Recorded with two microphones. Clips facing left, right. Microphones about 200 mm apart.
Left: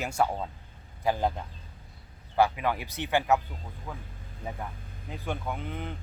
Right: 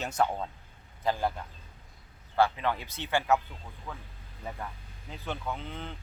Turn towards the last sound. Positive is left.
turn(degrees=15)  # may be behind; listen again after turning